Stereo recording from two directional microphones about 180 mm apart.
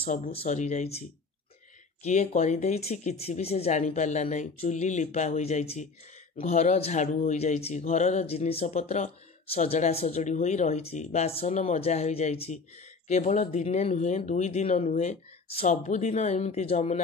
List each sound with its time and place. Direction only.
0.3 s speech: 35° left (ahead or behind)
2.0 s speech: 40° left (ahead or behind)